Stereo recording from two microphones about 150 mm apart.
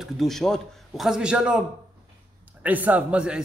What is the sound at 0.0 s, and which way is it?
Speech, centre (ahead or behind).